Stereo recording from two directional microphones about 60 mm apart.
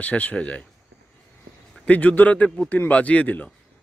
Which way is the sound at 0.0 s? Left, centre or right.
Left.